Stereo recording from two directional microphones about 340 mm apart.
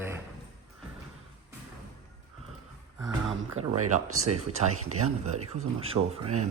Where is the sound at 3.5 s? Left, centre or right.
Right.